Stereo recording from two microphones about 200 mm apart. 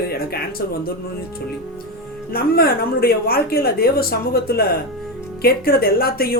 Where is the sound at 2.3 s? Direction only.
50° left (ahead or behind).